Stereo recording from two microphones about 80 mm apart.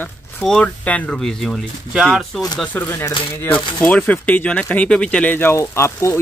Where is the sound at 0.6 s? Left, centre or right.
Centre.